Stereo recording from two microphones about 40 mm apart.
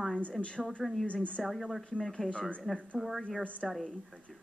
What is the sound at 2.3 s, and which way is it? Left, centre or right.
Speech, left.